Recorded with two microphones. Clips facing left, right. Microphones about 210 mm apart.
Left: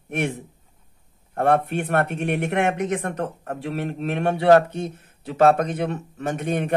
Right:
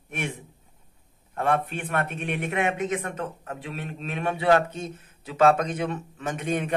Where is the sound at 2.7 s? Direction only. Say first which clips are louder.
Left 3 dB; 45° left (ahead or behind).